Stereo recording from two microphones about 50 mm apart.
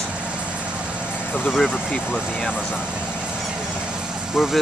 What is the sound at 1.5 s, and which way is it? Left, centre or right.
Speech, centre.